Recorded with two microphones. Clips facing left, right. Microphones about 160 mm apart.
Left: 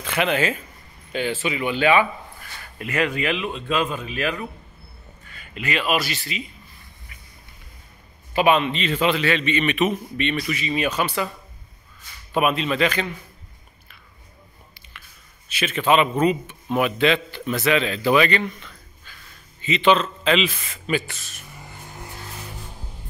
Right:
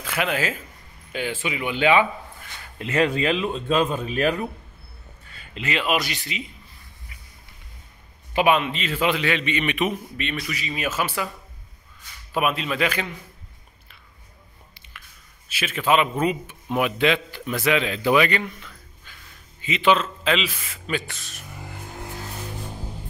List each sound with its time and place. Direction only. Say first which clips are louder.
0.0 s a man's voice: left 3 dB; centre (ahead or behind)
2.8 s speech: right 2 dB; 25° right (ahead or behind)
8.3 s a man's voice: left 1 dB; 10° right (ahead or behind)
12.4 s speech: left 3 dB; centre (ahead or behind)
15.4 s a man's voice: left 2 dB; 5° right (ahead or behind)
19.1 s a sound: left 1 dB; 20° right (ahead or behind)
19.6 s speech: left 2 dB; 10° right (ahead or behind)